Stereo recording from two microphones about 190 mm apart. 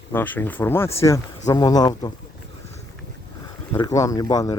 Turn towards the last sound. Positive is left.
turn(degrees=20)  # may be behind; listen again after turning